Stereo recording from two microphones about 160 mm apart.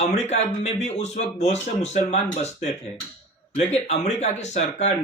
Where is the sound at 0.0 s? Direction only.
45° left (ahead or behind).